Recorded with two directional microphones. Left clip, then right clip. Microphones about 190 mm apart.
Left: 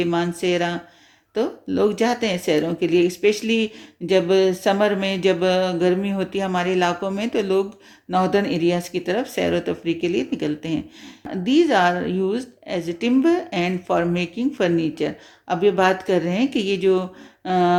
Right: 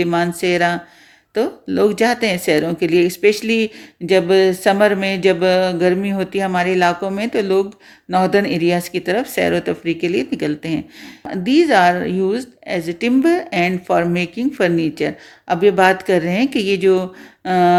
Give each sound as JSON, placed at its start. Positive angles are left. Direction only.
{"t": 0.0, "sound": "a woman's voice", "side_deg": -30}